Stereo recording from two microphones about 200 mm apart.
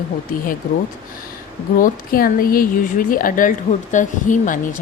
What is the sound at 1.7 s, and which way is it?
A woman's voice, 45° left (ahead or behind).